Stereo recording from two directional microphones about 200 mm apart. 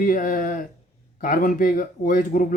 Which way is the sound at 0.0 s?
45° left (ahead or behind).